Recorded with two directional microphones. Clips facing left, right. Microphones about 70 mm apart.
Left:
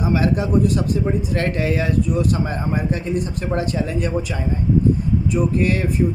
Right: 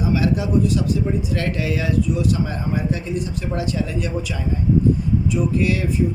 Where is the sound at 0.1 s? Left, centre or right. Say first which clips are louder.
Left 1 dB; left.